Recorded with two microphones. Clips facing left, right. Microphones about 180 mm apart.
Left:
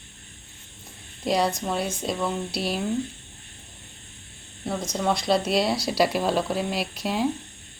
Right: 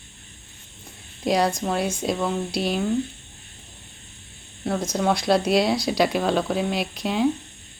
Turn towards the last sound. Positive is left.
turn(degrees=5)  # may be behind; listen again after turning